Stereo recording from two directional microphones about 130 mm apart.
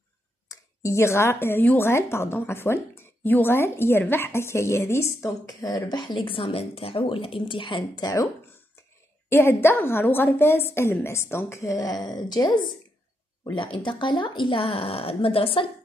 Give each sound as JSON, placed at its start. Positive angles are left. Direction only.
{"t": 0.5, "sound": "speech", "side_deg": 20}
{"t": 9.3, "sound": "speech", "side_deg": 20}